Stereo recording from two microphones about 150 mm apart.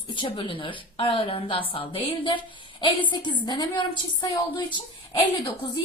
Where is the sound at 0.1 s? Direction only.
35° left (ahead or behind).